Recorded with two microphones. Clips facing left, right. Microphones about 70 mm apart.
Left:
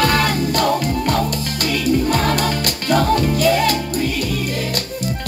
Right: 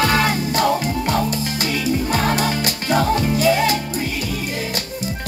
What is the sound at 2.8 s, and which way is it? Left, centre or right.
Music, centre.